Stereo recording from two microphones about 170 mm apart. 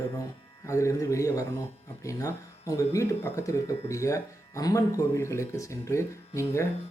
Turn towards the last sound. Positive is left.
turn(degrees=15)  # may be behind; listen again after turning